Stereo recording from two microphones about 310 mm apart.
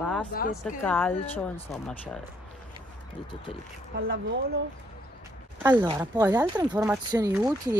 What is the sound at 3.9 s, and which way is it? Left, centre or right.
Speech, right.